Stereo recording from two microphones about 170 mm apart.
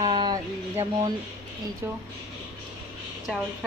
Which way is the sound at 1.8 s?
15° right (ahead or behind).